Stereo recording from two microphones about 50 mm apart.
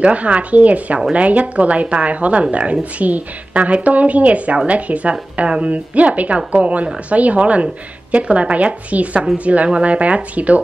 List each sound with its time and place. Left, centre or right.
0.0 s a woman's voice: right